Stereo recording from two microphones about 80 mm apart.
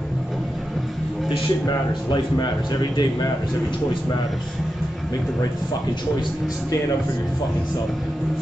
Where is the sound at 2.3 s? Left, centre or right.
Left.